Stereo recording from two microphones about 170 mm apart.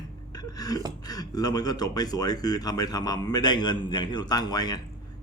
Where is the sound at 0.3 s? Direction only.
20° left (ahead or behind).